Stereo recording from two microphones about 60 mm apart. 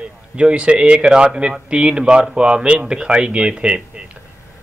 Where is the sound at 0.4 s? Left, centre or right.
Centre.